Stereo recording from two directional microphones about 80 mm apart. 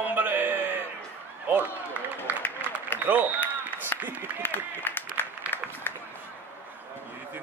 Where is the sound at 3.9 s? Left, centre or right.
Left.